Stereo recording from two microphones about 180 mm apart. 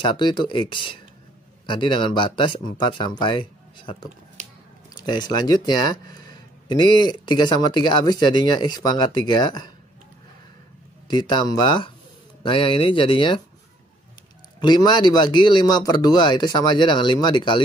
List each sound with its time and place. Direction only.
0.0 s speech: 25° left (ahead or behind)
11.1 s speech: 25° left (ahead or behind)
14.6 s speech: 25° left (ahead or behind)